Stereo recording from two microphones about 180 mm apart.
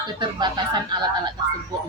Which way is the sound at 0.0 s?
25° right (ahead or behind).